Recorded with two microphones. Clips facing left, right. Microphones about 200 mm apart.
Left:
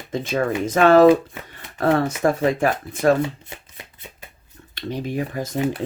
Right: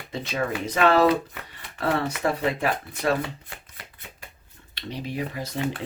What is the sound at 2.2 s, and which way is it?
Speech, 45° left (ahead or behind).